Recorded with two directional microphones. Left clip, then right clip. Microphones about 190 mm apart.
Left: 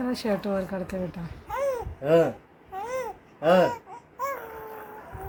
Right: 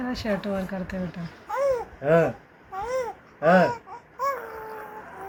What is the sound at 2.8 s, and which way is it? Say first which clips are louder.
Babbling: right 4 dB; 10° left (ahead or behind).